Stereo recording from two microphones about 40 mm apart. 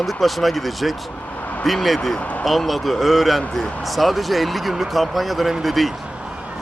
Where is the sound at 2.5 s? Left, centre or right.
Centre.